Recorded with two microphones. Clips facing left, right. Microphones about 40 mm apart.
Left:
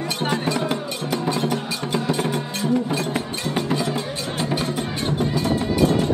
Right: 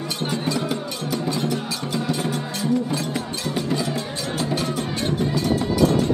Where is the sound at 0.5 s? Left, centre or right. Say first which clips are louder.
Left 1 dB; left.